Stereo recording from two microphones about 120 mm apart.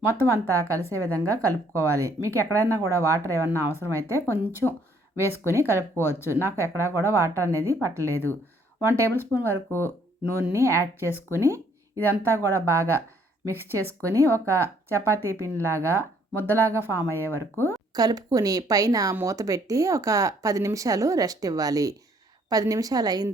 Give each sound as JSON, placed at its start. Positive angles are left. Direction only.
{"t": 0.1, "sound": "a woman's voice", "side_deg": -25}
{"t": 9.1, "sound": "a woman's voice", "side_deg": -20}
{"t": 17.9, "sound": "a woman's voice", "side_deg": -35}